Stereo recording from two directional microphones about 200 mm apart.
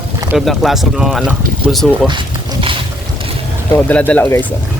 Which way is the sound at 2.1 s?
25° right (ahead or behind).